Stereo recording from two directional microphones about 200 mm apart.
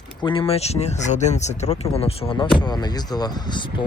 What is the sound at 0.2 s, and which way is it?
Speech, 25° left (ahead or behind).